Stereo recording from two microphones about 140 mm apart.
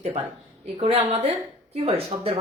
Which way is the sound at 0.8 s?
45° right (ahead or behind).